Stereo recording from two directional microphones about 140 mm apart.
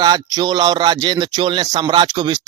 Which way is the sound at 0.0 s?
30° right (ahead or behind).